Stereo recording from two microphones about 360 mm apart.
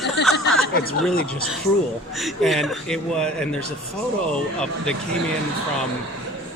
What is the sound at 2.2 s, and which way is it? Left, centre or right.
A man's voice, centre.